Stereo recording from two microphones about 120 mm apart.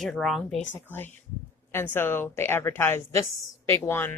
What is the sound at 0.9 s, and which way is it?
A woman's voice, 15° left (ahead or behind).